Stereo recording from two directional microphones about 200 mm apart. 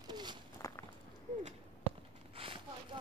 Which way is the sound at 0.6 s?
15° left (ahead or behind).